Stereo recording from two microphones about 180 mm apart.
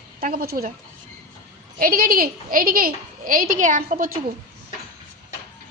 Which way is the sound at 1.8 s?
55° right (ahead or behind).